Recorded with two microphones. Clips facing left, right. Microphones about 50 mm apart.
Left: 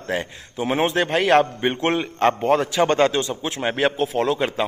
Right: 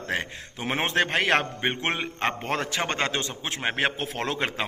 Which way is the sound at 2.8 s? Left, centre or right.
Right.